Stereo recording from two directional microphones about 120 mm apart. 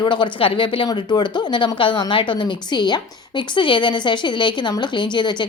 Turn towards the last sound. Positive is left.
turn(degrees=40)  # may be behind; listen again after turning